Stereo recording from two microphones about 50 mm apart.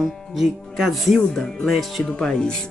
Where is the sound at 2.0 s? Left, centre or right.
Centre.